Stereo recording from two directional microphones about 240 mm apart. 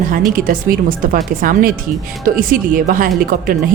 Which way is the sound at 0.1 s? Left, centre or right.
Right.